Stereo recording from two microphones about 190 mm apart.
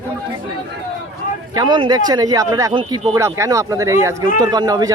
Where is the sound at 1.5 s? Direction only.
25° right (ahead or behind).